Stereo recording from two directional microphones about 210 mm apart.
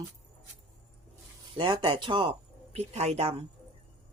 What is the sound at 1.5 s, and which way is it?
Speech, 25° right (ahead or behind).